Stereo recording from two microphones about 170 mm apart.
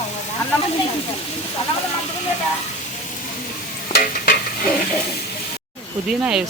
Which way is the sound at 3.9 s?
60° left (ahead or behind).